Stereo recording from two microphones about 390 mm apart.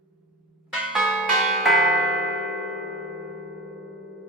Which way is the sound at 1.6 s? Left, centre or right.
Centre.